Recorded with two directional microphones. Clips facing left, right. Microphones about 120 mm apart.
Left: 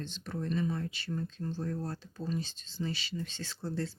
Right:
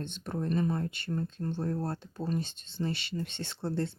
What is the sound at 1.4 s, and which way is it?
Speech, 60° right (ahead or behind).